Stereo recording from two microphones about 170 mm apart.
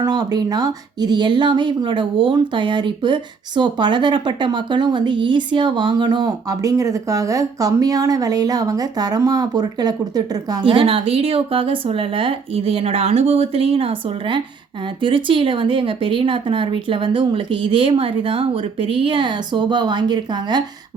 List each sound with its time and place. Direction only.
0.0 s speech: 25° right (ahead or behind)